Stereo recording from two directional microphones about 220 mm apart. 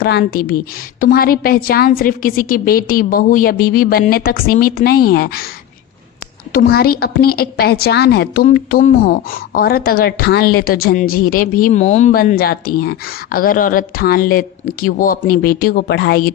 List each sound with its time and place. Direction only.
0.0 s a woman's voice: 45° left (ahead or behind)
6.5 s a woman's voice: 45° left (ahead or behind)